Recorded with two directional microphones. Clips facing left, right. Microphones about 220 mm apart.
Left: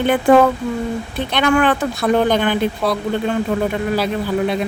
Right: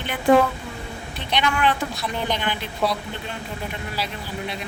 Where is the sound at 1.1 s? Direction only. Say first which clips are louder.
Left 8 dB; 50° left (ahead or behind).